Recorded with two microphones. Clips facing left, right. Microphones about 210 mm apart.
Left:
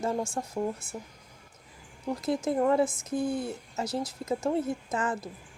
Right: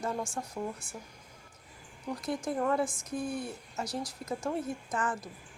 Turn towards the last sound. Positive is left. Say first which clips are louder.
# left 3 dB
turn(degrees=25)  # may be behind; listen again after turning